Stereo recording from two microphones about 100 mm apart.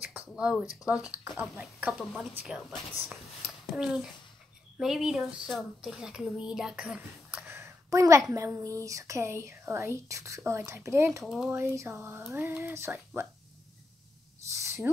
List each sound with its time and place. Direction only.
0.0 s speech: 10° right (ahead or behind)
7.4 s a woman's voice: 25° right (ahead or behind)
11.2 s speech: 5° right (ahead or behind)
11.5 s speech: 25° right (ahead or behind)
14.5 s a sound: 30° right (ahead or behind)